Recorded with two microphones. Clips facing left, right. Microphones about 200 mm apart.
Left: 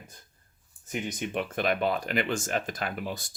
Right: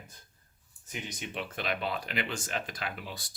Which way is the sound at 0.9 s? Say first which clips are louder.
Left 8 dB; 50° left (ahead or behind).